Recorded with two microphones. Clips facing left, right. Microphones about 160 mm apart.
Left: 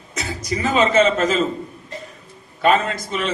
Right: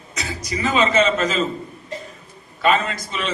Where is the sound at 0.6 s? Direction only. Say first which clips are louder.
Left 2 dB; 50° left (ahead or behind).